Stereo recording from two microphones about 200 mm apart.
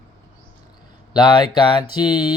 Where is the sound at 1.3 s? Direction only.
25° left (ahead or behind).